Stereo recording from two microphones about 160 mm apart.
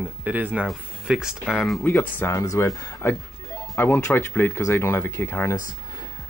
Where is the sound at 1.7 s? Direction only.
10° left (ahead or behind).